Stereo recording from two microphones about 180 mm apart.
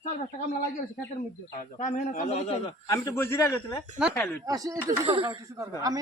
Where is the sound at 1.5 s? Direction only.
45° left (ahead or behind).